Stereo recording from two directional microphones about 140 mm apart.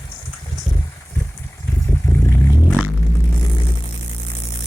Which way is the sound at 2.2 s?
20° left (ahead or behind).